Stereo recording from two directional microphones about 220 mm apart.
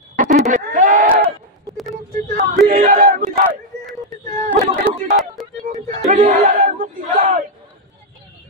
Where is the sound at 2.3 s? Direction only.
35° right (ahead or behind).